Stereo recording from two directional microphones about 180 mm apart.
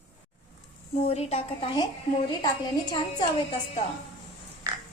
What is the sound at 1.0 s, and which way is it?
Speech, 35° left (ahead or behind).